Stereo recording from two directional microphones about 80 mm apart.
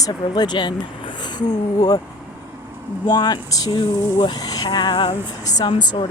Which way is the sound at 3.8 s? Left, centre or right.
Left.